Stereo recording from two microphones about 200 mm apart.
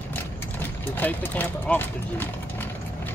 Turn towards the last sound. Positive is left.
turn(degrees=10)  # may be behind; listen again after turning